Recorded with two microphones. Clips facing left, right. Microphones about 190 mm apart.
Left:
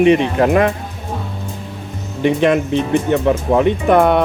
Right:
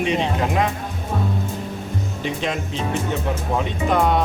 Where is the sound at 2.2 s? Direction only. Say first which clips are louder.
Left 13 dB; 60° left (ahead or behind).